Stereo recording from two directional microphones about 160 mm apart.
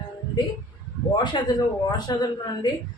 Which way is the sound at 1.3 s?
25° left (ahead or behind).